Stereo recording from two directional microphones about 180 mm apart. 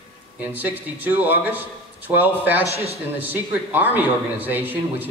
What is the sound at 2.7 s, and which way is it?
Speech, 35° right (ahead or behind).